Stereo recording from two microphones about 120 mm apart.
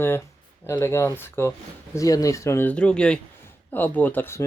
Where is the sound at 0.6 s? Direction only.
20° left (ahead or behind).